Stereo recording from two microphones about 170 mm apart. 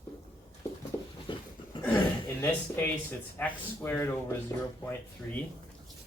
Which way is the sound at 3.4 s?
10° left (ahead or behind).